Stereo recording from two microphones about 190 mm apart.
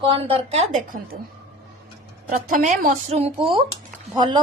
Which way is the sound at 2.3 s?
40° right (ahead or behind).